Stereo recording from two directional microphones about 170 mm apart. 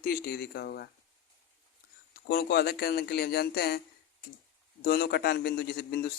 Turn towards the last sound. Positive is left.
turn(degrees=65)  # may be behind; listen again after turning